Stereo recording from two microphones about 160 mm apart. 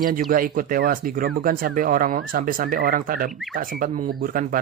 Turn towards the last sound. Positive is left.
turn(degrees=-60)  # may be behind; listen again after turning